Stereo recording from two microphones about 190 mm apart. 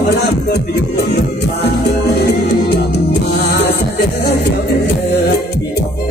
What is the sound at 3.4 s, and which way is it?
Music, 60° left (ahead or behind).